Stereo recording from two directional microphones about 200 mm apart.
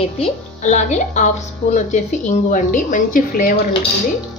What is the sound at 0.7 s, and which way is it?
A woman's voice, 40° left (ahead or behind).